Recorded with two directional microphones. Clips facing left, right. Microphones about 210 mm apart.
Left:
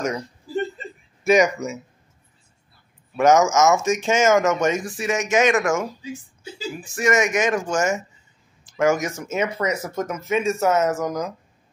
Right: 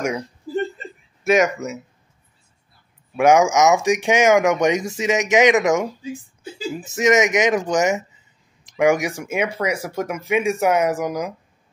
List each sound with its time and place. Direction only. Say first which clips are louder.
1.2 s speech: even; centre (ahead or behind)
3.2 s speech: right 1 dB; 10° right (ahead or behind)